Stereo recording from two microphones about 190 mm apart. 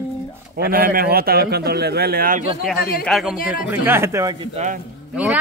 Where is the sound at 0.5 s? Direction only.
50° right (ahead or behind).